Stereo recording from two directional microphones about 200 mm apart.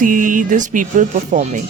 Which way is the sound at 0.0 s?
40° right (ahead or behind).